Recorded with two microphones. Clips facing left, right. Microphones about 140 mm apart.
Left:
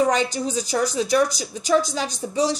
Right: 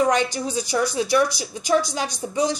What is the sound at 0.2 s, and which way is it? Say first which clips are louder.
A woman's voice: left 1 dB; 35° left (ahead or behind).